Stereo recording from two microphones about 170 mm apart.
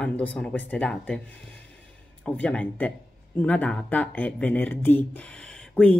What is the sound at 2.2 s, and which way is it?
Speech, 10° left (ahead or behind).